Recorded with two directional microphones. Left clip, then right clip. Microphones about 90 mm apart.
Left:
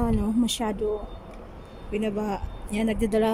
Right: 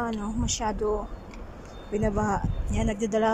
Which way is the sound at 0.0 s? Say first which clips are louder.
Left 5 dB; 45° left (ahead or behind).